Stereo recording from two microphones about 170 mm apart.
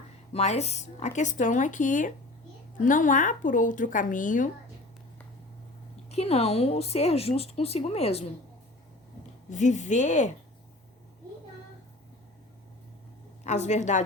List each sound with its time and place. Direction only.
0.3 s speech: 40° left (ahead or behind)
6.1 s speech: 35° left (ahead or behind)
9.5 s speech: 45° left (ahead or behind)
13.4 s a woman's voice: 45° left (ahead or behind)